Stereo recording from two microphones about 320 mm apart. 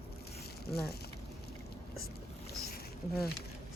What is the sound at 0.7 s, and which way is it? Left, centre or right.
Speech, left.